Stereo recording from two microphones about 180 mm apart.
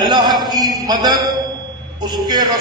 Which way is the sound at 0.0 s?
25° right (ahead or behind).